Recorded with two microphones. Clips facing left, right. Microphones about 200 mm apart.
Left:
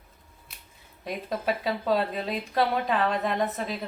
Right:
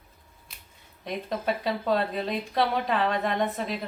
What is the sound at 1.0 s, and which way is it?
A woman's voice, centre (ahead or behind).